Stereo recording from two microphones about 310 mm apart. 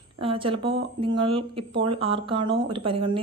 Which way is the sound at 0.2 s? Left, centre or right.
Centre.